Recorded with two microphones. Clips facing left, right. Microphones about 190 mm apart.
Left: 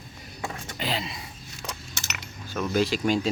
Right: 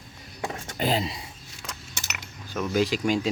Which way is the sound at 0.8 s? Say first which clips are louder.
Right 6 dB; 40° right (ahead or behind).